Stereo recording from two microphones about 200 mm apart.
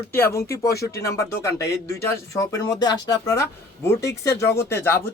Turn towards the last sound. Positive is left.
turn(degrees=10)  # may be behind; listen again after turning